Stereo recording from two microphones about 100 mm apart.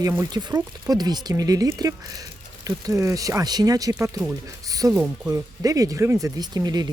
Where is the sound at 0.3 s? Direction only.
40° right (ahead or behind).